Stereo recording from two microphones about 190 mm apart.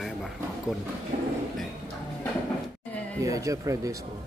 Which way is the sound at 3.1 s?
15° right (ahead or behind).